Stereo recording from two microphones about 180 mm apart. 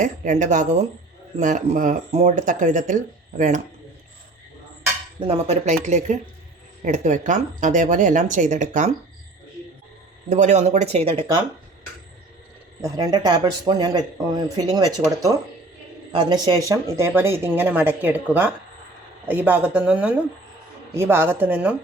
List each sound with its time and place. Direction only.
0.0 s speech: 45° right (ahead or behind)
5.2 s speech: 35° right (ahead or behind)
10.2 s speech: 40° right (ahead or behind)
12.8 s speech: 25° right (ahead or behind)
16.1 s speech: 25° right (ahead or behind); by 21.8 s 10° right (ahead or behind)